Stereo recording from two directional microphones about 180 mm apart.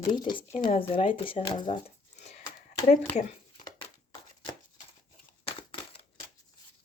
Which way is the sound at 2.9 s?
40° left (ahead or behind).